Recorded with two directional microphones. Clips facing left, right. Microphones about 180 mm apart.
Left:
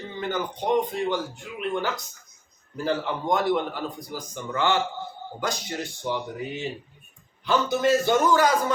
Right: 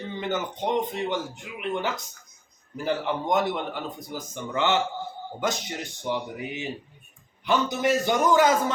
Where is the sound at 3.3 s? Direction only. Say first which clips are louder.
Left 3 dB; 20° right (ahead or behind).